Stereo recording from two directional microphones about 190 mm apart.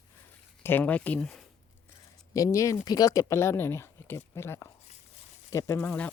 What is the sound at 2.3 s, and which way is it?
Speech, 15° left (ahead or behind).